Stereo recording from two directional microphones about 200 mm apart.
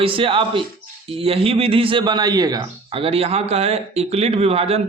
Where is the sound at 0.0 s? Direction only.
25° right (ahead or behind).